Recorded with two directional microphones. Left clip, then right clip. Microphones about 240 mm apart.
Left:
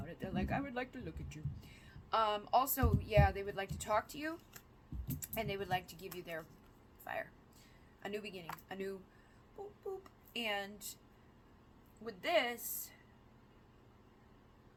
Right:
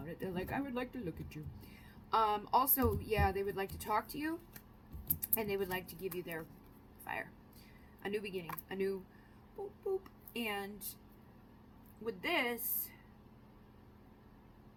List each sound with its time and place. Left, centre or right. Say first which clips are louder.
0.1 s speech: even; centre
10.0 s a woman's voice: even; centre
12.0 s speech: left 1 dB; centre